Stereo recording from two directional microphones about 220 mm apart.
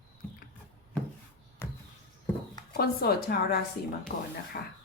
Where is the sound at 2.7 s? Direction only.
45° left (ahead or behind).